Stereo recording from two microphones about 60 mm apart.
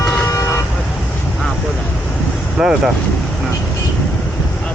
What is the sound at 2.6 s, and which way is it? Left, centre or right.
Speech, centre.